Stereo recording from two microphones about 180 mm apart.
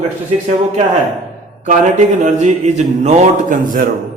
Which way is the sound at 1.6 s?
45° right (ahead or behind).